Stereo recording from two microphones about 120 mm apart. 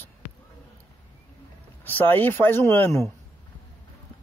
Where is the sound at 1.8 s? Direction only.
15° left (ahead or behind).